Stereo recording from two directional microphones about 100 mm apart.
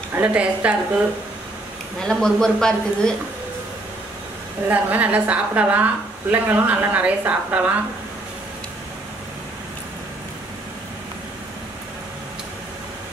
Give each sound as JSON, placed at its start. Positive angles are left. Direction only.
{"t": 0.1, "sound": "speech", "side_deg": -15}
{"t": 2.0, "sound": "a woman's voice", "side_deg": 5}
{"t": 4.6, "sound": "speech", "side_deg": -15}